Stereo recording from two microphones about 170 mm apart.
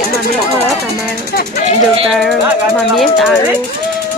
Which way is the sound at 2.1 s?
Centre (ahead or behind).